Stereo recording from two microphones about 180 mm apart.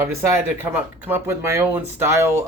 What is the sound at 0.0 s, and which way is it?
Speech, 10° right (ahead or behind).